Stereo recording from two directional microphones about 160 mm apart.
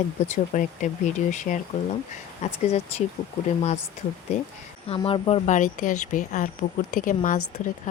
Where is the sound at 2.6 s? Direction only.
40° left (ahead or behind).